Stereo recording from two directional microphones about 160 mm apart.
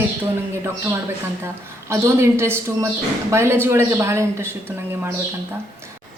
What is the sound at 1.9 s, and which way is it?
A woman's voice, 15° right (ahead or behind).